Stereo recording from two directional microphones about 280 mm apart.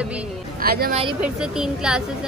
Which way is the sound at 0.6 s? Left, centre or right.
Right.